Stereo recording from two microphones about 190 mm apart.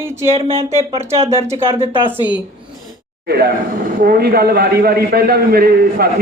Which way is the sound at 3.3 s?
55° right (ahead or behind).